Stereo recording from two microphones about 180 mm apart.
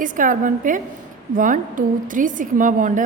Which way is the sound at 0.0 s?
45° right (ahead or behind).